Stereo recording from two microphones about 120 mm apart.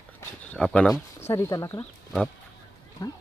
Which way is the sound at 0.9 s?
20° left (ahead or behind).